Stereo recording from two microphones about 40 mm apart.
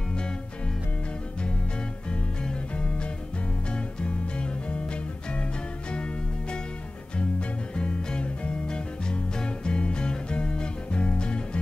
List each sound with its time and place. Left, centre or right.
2.0 s music: left
7.2 s music: left